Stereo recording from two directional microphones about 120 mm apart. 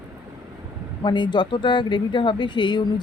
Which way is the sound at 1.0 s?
40° left (ahead or behind).